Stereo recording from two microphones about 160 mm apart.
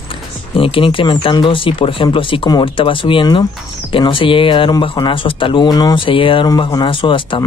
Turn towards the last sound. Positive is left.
turn(degrees=30)  # may be behind; listen again after turning